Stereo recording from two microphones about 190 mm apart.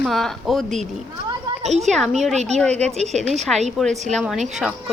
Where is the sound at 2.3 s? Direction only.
35° right (ahead or behind).